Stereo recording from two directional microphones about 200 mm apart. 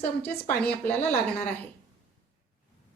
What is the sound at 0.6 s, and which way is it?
Speech, 5° left (ahead or behind).